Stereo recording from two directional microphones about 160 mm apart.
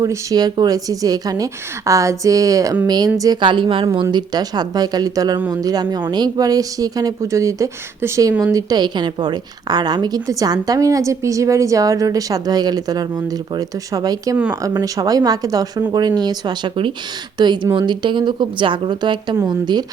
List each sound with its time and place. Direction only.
0.0 s a woman's voice: 20° right (ahead or behind)